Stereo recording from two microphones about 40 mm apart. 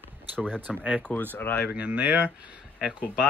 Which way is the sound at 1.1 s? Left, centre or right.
Left.